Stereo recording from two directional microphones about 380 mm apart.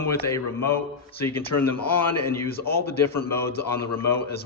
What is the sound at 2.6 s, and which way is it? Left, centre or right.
Speech, left.